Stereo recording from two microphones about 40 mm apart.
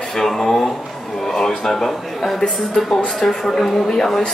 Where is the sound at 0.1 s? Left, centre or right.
Centre.